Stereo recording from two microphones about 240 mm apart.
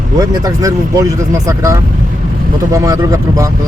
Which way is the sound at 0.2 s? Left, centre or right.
Centre.